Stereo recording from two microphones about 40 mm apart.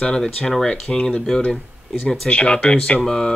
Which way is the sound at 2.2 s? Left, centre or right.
Left.